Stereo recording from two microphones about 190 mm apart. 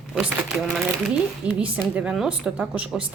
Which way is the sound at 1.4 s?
5° right (ahead or behind).